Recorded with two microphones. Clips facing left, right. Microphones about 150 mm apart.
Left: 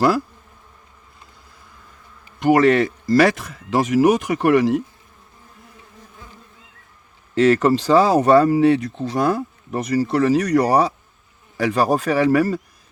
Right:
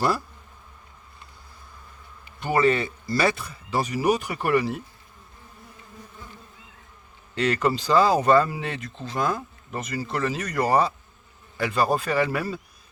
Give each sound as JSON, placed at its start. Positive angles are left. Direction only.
{"t": 2.4, "sound": "speech", "side_deg": 85}
{"t": 7.3, "sound": "speech", "side_deg": 75}